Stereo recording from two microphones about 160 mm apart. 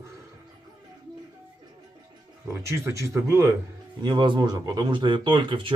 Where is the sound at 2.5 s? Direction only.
15° right (ahead or behind).